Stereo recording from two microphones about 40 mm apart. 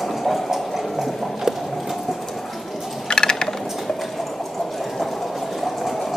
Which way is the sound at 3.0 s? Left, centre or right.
Centre.